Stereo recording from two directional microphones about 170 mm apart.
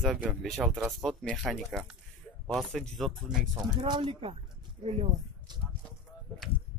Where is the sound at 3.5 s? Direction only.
25° right (ahead or behind).